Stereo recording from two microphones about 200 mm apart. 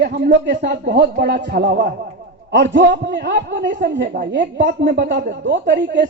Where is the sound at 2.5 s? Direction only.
65° right (ahead or behind).